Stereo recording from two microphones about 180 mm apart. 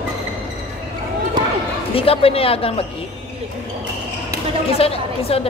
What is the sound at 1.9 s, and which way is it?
Speech, 30° left (ahead or behind).